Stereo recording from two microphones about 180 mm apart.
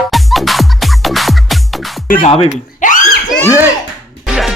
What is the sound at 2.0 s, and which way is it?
Speech, 50° left (ahead or behind).